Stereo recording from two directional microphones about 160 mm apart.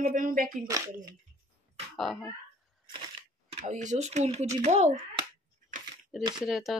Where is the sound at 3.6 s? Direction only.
50° right (ahead or behind).